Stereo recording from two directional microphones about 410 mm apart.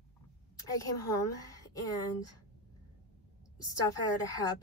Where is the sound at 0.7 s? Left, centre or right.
Centre.